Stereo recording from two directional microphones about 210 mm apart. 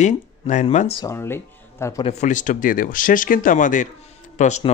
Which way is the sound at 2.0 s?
35° left (ahead or behind).